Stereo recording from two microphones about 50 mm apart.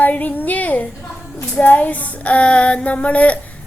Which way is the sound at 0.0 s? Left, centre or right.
Left.